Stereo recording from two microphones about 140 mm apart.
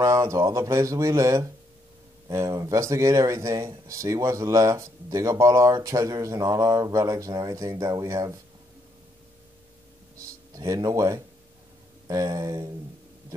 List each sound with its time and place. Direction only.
0.0 s speech: 25° right (ahead or behind)
10.5 s speech: 25° right (ahead or behind)